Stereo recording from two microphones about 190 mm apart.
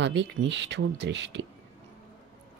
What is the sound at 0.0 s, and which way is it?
Speech, 70° right (ahead or behind).